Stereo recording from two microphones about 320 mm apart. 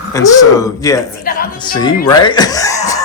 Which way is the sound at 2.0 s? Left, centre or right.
Centre.